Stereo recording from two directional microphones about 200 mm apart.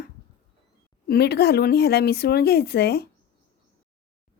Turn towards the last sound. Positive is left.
turn(degrees=55)  # may be behind; listen again after turning